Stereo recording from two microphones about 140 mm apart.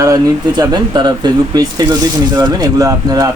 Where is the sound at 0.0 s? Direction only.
25° right (ahead or behind).